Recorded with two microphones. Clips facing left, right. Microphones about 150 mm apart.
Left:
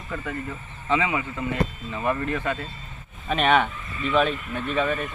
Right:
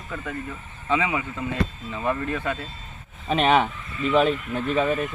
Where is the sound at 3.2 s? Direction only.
25° right (ahead or behind).